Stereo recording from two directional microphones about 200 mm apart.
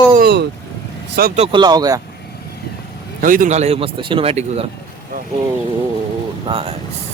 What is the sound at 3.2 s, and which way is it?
Speech, 45° right (ahead or behind).